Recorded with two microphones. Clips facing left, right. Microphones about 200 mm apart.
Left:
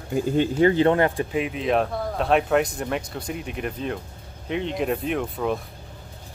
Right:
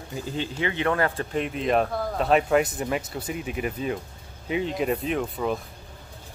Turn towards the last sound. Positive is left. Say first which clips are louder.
# left 1 dB
turn(degrees=0)  # may be behind; listen again after turning